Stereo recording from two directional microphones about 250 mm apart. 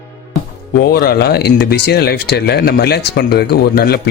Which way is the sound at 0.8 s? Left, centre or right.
Left.